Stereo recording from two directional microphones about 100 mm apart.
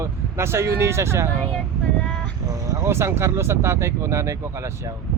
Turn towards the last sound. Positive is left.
turn(degrees=-30)  # may be behind; listen again after turning